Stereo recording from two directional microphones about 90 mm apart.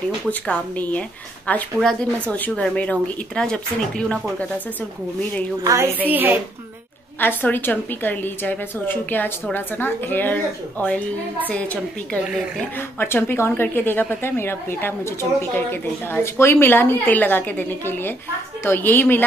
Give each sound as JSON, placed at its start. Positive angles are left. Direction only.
{"t": 0.3, "sound": "speech", "side_deg": 20}
{"t": 5.6, "sound": "a woman's voice", "side_deg": -40}
{"t": 6.0, "sound": "a woman's voice", "side_deg": -20}
{"t": 7.2, "sound": "a woman's voice", "side_deg": 20}
{"t": 13.0, "sound": "a woman's voice", "side_deg": 25}